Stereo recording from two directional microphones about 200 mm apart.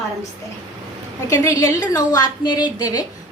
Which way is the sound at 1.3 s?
15° left (ahead or behind).